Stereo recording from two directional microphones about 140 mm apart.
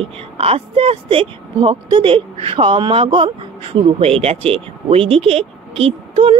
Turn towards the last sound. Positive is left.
turn(degrees=-45)  # may be behind; listen again after turning